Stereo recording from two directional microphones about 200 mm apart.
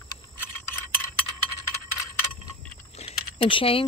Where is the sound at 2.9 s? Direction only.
30° left (ahead or behind).